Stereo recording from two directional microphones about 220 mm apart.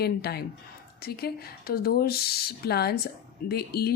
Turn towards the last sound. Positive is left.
turn(degrees=45)  # may be behind; listen again after turning